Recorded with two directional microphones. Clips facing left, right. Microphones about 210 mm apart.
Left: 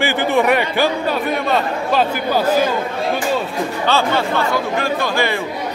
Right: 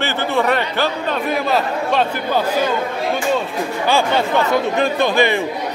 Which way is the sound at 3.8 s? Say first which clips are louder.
Right 1 dB; 15° right (ahead or behind).